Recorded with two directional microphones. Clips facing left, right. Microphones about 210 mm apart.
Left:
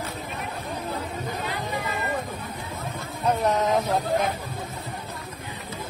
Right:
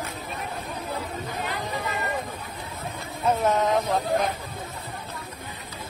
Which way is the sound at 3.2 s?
Centre (ahead or behind).